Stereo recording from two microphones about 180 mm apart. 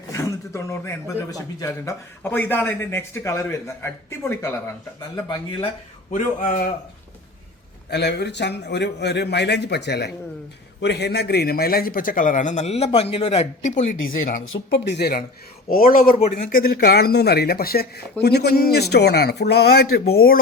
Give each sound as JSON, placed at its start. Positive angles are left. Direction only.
{"t": 0.1, "sound": "a man's voice", "side_deg": 15}
{"t": 5.1, "sound": "speech", "side_deg": 25}
{"t": 6.1, "sound": "a man's voice", "side_deg": 45}
{"t": 7.9, "sound": "a man's voice", "side_deg": 70}
{"t": 14.0, "sound": "speech", "side_deg": 90}
{"t": 15.7, "sound": "a man's voice", "side_deg": 50}